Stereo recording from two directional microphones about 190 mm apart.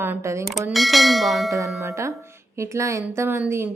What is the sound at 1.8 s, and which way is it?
A woman's voice, 15° right (ahead or behind).